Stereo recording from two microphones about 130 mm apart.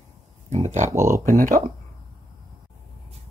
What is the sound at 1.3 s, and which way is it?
Speech, 90° right.